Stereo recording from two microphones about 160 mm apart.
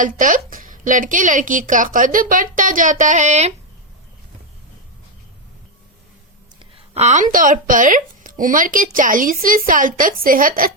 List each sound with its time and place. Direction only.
0.0 s speech: 55° right (ahead or behind)
6.9 s speech: 45° right (ahead or behind)